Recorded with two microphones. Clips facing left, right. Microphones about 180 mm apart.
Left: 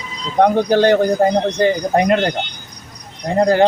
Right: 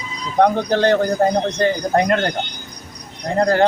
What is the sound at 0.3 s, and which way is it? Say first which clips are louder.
Speech: left 3 dB; 15° left (ahead or behind).